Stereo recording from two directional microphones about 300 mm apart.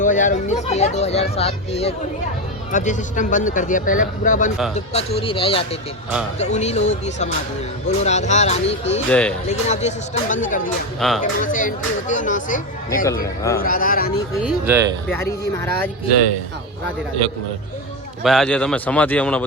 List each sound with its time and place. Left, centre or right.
0.0 s speech: left
9.0 s a man's voice: centre
9.5 s speech: left
11.0 s a man's voice: centre
11.5 s speech: left
13.2 s speech: centre
13.6 s speech: left
14.4 s speech: centre
15.1 s speech: centre
18.2 s a man's voice: centre